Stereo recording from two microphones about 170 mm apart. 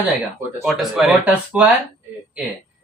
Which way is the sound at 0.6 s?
Centre (ahead or behind).